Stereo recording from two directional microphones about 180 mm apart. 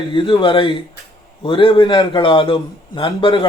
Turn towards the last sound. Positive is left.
turn(degrees=30)  # may be behind; listen again after turning